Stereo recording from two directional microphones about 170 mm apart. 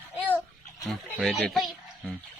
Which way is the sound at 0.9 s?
Centre (ahead or behind).